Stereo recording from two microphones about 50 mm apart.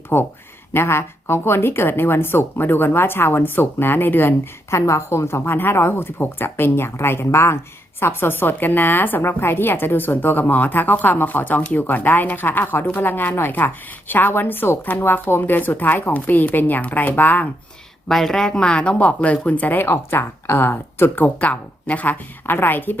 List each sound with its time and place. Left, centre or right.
0.1 s a woman's voice: left
4.7 s a woman's voice: left
5.5 s a woman's voice: left
18.1 s speech: centre; by 19.8 s left
19.8 s speech: left
21.3 s a woman's voice: left
22.4 s speech: left